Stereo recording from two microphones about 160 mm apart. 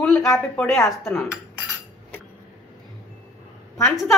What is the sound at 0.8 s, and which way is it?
Speech, 15° left (ahead or behind).